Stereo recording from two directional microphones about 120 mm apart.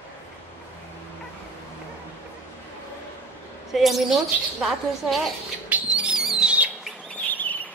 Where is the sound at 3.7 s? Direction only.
Centre (ahead or behind).